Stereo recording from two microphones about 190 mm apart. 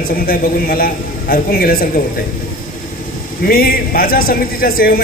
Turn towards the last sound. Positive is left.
turn(degrees=50)  # may be behind; listen again after turning